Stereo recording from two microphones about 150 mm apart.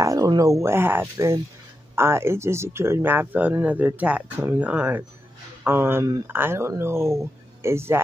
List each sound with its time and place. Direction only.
0.0 s speech: 25° right (ahead or behind)